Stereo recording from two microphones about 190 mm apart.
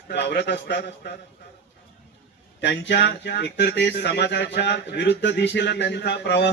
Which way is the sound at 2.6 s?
65° left (ahead or behind).